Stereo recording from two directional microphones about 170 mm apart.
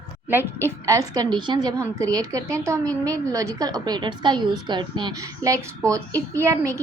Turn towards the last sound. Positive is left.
turn(degrees=-15)  # may be behind; listen again after turning